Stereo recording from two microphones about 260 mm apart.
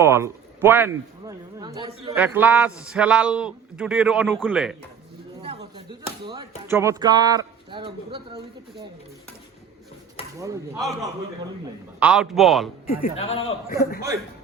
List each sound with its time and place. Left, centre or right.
0.0 s a man's voice: centre
2.1 s a man's voice: centre
5.7 s chop: centre
6.7 s a man's voice: centre
10.8 s a man's voice: centre
12.9 s speech: left
13.7 s a man's voice: left